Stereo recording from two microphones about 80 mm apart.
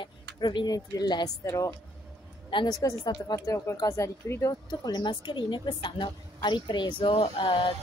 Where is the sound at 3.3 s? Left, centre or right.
Left.